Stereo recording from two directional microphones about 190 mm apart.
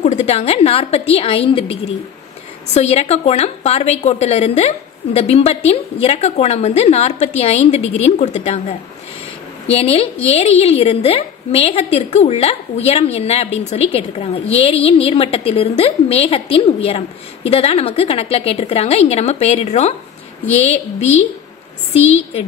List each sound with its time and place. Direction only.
0.0 s a woman's voice: 35° left (ahead or behind)